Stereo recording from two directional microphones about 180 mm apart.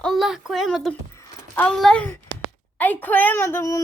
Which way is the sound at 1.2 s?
10° left (ahead or behind).